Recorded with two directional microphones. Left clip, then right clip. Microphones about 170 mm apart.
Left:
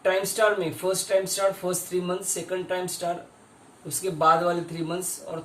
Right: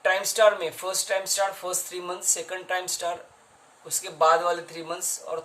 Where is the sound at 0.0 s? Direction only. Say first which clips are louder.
Right 2 dB; 45° right (ahead or behind).